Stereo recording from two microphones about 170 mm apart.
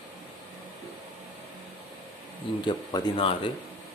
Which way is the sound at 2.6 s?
25° left (ahead or behind).